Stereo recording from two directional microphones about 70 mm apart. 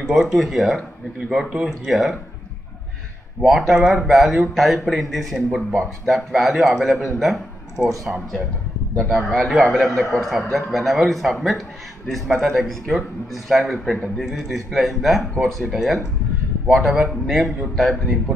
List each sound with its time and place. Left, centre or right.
0.0 s a man's voice: centre
3.3 s a man's voice: centre
8.9 s a man's voice: centre